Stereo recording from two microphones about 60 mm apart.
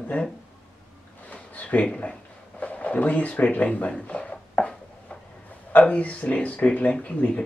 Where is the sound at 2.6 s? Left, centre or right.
Left.